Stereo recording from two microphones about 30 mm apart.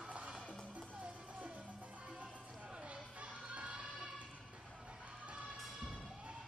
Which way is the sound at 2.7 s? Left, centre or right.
Right.